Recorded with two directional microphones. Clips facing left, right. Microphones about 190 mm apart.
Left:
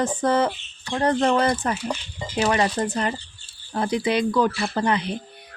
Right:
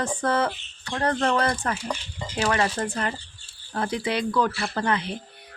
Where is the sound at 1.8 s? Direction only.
10° left (ahead or behind).